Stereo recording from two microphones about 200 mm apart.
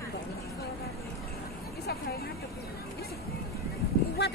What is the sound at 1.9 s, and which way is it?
Speech, 50° left (ahead or behind).